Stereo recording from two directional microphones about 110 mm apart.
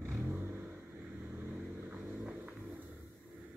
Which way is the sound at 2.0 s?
15° right (ahead or behind).